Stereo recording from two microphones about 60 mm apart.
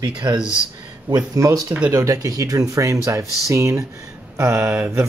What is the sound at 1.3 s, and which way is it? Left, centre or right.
Speech, right.